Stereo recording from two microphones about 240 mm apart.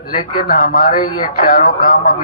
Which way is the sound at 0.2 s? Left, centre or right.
Left.